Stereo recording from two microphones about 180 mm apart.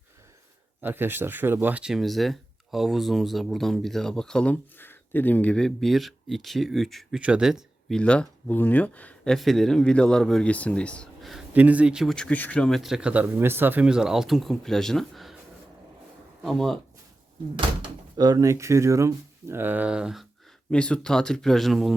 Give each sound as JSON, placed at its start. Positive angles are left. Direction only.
{"t": 0.8, "sound": "speech", "side_deg": -10}
{"t": 16.5, "sound": "speech", "side_deg": 0}
{"t": 17.8, "sound": "speech", "side_deg": -20}